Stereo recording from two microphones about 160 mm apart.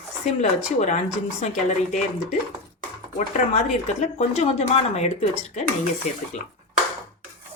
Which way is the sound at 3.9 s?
45° left (ahead or behind).